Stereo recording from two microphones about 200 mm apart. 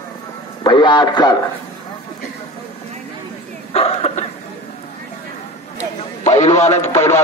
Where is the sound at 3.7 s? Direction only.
30° left (ahead or behind).